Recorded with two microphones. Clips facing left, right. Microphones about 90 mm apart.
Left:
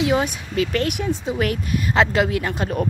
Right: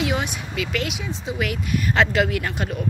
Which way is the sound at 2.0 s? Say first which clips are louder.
Left 2 dB; 25° left (ahead or behind).